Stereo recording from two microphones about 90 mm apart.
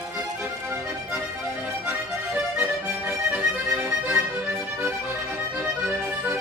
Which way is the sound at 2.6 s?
20° right (ahead or behind).